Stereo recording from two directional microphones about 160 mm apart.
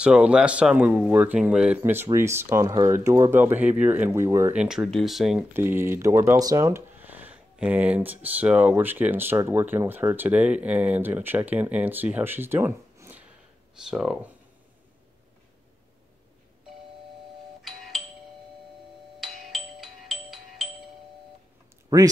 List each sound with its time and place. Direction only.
0.0 s speech: 5° right (ahead or behind)
4.6 s speech: 5° right (ahead or behind)
5.5 s speech: 15° right (ahead or behind)
13.7 s speech: centre (ahead or behind)
19.1 s music: centre (ahead or behind)
21.8 s speech: 20° right (ahead or behind)